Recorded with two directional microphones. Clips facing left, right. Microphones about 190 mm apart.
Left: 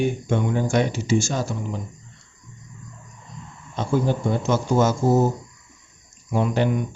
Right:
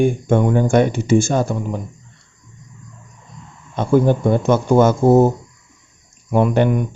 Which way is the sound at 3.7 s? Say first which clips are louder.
Right 7 dB; 55° right (ahead or behind).